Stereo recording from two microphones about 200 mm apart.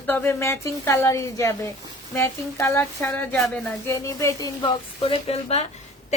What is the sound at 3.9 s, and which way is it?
Speech, 15° left (ahead or behind).